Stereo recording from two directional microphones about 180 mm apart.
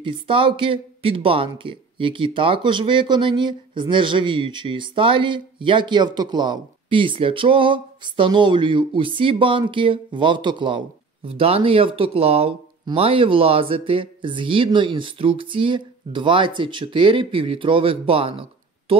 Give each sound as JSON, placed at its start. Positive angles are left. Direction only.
{"t": 0.0, "sound": "speech", "side_deg": -30}